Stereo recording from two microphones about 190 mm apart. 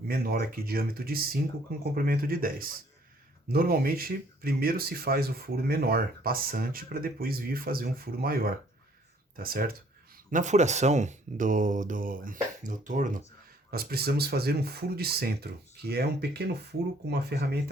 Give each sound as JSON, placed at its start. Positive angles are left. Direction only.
{"t": 0.1, "sound": "speech", "side_deg": -55}
{"t": 10.3, "sound": "speech", "side_deg": -40}
{"t": 13.7, "sound": "speech", "side_deg": -55}